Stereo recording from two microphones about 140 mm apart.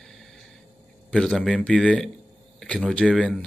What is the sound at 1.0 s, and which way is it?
Speech, 5° left (ahead or behind).